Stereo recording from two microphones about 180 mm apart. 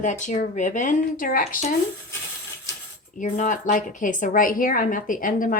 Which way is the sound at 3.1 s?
45° left (ahead or behind).